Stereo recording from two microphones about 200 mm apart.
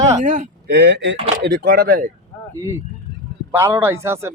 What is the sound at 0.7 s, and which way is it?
Speech, 60° right (ahead or behind).